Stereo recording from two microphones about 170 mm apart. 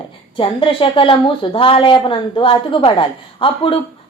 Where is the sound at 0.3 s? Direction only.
30° left (ahead or behind).